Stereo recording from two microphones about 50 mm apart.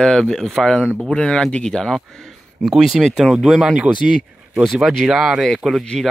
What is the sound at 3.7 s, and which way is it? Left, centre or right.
Speech, right.